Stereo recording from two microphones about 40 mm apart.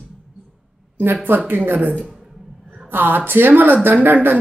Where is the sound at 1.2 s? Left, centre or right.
Right.